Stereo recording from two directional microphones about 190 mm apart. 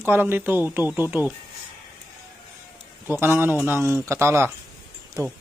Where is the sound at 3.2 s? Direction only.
10° right (ahead or behind).